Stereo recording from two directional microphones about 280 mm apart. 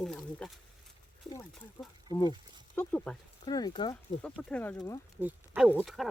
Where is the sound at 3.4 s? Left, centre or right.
Centre.